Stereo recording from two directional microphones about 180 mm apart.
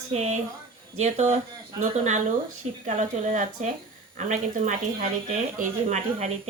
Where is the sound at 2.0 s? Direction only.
40° right (ahead or behind).